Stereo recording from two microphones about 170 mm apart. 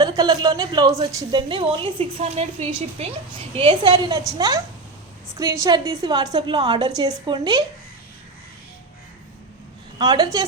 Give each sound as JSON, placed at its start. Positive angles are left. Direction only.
{"t": 0.0, "sound": "a man's voice", "side_deg": -20}
{"t": 3.5, "sound": "a man's voice", "side_deg": -30}
{"t": 10.0, "sound": "a man's voice", "side_deg": -25}